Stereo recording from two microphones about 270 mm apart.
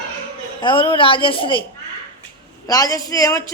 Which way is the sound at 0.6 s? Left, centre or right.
Centre.